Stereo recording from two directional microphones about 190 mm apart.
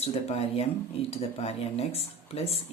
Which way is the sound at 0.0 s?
30° left (ahead or behind).